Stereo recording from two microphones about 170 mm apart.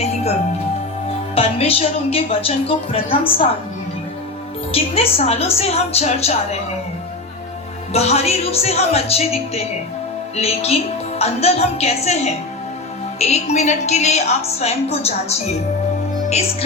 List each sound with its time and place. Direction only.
1.4 s speech: 35° left (ahead or behind)
4.7 s speech: 35° left (ahead or behind)
7.9 s speech: 40° left (ahead or behind)